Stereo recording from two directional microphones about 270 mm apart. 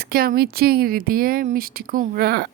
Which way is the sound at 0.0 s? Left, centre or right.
Right.